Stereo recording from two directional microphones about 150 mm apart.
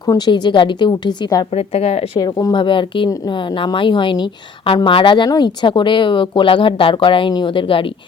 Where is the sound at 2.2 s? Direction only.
25° left (ahead or behind).